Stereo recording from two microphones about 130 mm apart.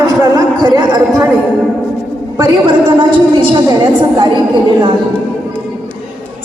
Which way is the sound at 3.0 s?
40° right (ahead or behind).